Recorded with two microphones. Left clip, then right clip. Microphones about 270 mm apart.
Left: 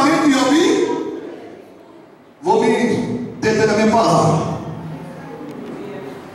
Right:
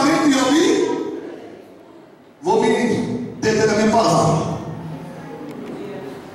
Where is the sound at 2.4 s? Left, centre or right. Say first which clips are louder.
Left 2 dB; centre.